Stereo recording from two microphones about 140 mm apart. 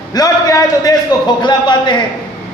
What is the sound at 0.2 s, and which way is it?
A man's voice, 25° left (ahead or behind).